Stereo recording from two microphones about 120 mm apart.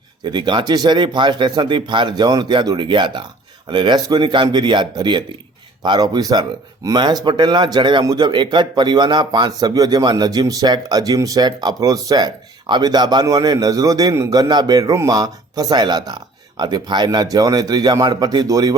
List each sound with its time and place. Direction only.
0.3 s speech: 40° right (ahead or behind)